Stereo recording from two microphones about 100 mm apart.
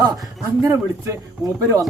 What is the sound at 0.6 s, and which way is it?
Speech, 30° right (ahead or behind).